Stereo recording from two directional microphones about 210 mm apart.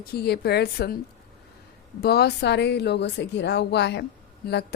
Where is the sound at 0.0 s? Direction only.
50° left (ahead or behind).